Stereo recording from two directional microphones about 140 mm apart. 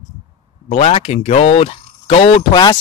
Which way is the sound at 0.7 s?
45° left (ahead or behind).